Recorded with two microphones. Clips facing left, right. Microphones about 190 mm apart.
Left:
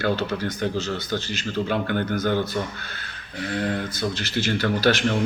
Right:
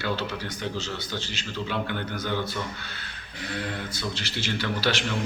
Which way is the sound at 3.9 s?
50° left (ahead or behind).